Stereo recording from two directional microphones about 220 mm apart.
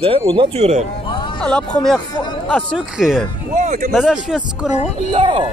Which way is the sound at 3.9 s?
Centre (ahead or behind).